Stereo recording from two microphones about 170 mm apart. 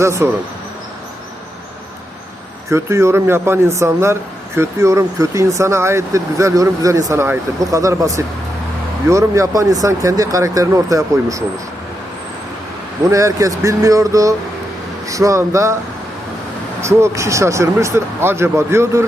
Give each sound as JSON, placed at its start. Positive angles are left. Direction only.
{"t": 0.0, "sound": "speech", "side_deg": -15}
{"t": 2.6, "sound": "speech", "side_deg": -15}
{"t": 13.1, "sound": "speech", "side_deg": -20}
{"t": 16.8, "sound": "speech", "side_deg": -15}